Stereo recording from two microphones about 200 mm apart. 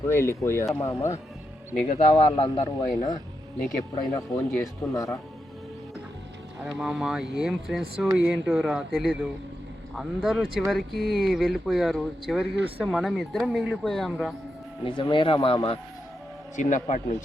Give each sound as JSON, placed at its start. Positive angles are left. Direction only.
{"t": 0.1, "sound": "speech", "side_deg": 10}
{"t": 1.9, "sound": "speech", "side_deg": 30}
{"t": 3.9, "sound": "speech", "side_deg": 20}
{"t": 6.7, "sound": "speech", "side_deg": -5}
{"t": 14.8, "sound": "speech", "side_deg": 25}
{"t": 16.6, "sound": "a man's voice", "side_deg": 35}